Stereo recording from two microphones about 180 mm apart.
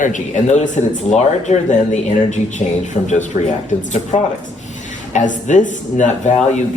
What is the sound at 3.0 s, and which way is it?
Speech, 40° left (ahead or behind).